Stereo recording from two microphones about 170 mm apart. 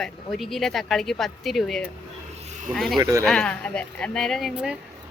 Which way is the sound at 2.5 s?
50° right (ahead or behind).